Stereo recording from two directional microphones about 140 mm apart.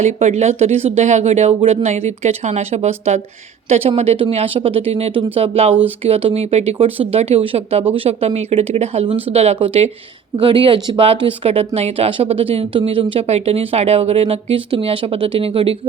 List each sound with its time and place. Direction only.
0.0 s speech: 55° right (ahead or behind)